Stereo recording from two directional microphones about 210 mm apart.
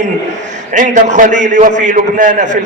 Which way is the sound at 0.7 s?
35° right (ahead or behind).